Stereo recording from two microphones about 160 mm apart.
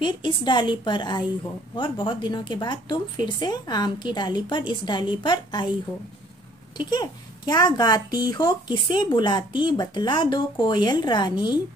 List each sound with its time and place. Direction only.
0.0 s speech: 30° left (ahead or behind)
6.8 s speech: 25° left (ahead or behind)